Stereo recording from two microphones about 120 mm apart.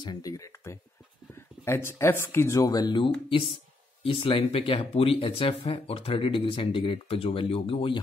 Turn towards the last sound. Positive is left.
turn(degrees=50)  # may be behind; listen again after turning